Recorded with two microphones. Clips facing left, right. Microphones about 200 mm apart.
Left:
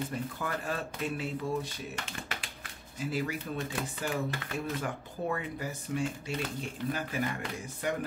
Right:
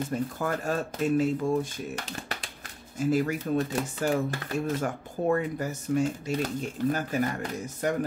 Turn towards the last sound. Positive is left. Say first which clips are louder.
# right 6 dB
turn(degrees=-45)  # may be behind; listen again after turning